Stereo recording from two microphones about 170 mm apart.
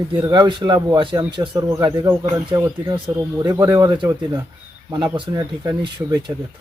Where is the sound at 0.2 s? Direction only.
25° right (ahead or behind).